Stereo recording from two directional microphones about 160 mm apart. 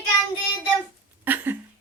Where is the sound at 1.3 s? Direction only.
10° right (ahead or behind).